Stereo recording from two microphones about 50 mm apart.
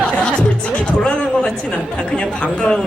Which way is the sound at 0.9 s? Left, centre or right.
Left.